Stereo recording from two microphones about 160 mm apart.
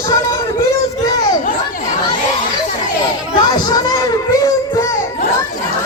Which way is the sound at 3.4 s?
25° left (ahead or behind).